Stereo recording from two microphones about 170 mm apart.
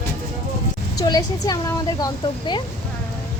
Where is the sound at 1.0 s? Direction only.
20° left (ahead or behind).